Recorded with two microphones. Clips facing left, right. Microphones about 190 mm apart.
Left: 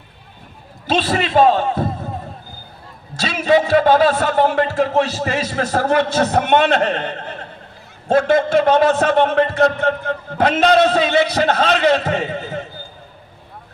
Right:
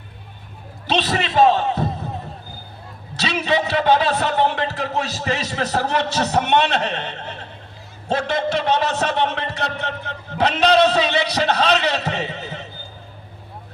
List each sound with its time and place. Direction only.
0.9 s a man's voice: 45° left (ahead or behind)
3.2 s a man's voice: 45° left (ahead or behind)